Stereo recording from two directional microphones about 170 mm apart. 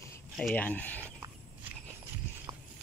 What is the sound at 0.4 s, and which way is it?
Speech, 5° left (ahead or behind).